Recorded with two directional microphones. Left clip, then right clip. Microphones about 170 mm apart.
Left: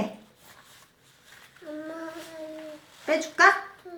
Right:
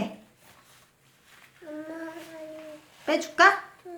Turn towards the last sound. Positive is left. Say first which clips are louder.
# even
turn(degrees=-35)  # may be behind; listen again after turning